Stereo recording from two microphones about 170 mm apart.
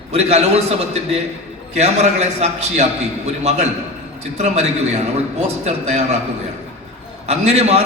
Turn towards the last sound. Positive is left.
turn(degrees=-40)  # may be behind; listen again after turning